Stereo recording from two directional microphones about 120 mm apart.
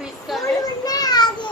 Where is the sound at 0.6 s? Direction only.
30° left (ahead or behind).